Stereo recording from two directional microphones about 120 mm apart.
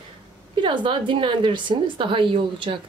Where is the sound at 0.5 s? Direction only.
40° right (ahead or behind).